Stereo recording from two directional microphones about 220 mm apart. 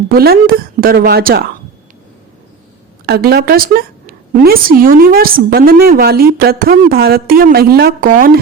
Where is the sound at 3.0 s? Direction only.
45° right (ahead or behind).